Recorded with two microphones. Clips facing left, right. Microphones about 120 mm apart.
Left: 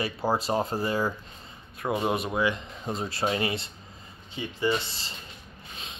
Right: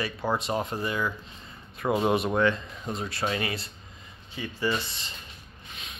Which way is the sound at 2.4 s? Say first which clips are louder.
Right 2 dB; 20° left (ahead or behind).